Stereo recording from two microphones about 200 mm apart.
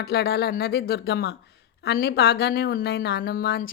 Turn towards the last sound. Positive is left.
turn(degrees=50)  # may be behind; listen again after turning